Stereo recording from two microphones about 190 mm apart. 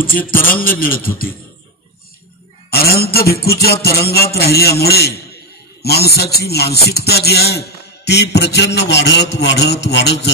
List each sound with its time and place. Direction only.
0.0 s music: 50° left (ahead or behind)
2.7 s music: 55° left (ahead or behind)